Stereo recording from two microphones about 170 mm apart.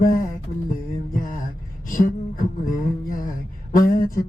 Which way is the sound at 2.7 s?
55° left (ahead or behind).